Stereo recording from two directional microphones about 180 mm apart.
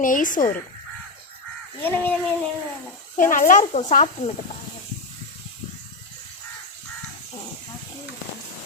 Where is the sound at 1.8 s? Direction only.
10° left (ahead or behind).